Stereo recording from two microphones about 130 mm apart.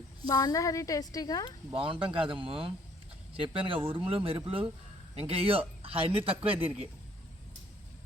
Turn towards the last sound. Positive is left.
turn(degrees=-45)  # may be behind; listen again after turning